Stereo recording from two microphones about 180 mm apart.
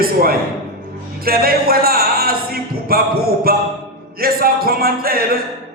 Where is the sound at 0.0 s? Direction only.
55° right (ahead or behind).